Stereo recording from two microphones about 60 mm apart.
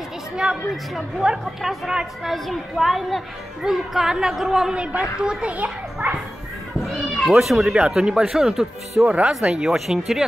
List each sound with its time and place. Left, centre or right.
0.4 s a woman's voice: centre
6.8 s cat: centre
7.8 s a woman's voice: centre
9.0 s a child's voice: right
9.5 s a woman's voice: centre